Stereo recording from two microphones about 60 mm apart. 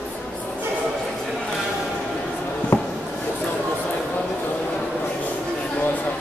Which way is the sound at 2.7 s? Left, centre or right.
Left.